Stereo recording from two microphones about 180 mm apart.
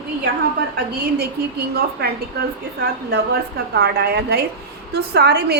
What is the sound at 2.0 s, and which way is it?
Speech, 60° right (ahead or behind).